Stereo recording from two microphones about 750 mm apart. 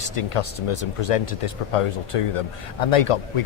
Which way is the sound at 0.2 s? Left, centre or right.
Left.